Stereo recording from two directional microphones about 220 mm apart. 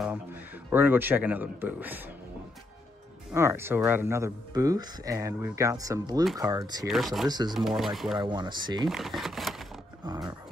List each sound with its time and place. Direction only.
0.0 s speech: 10° right (ahead or behind)
3.3 s speech: 10° right (ahead or behind)
7.5 s speech: centre (ahead or behind)
8.2 s speech: 20° right (ahead or behind)
8.8 s speech: centre (ahead or behind)
10.0 s speech: 15° right (ahead or behind)